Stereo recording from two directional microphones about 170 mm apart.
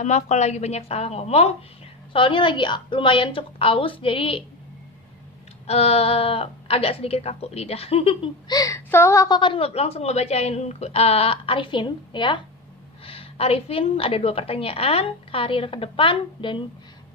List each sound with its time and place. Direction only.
0.0 s speech: 40° left (ahead or behind)
5.7 s speech: 35° left (ahead or behind)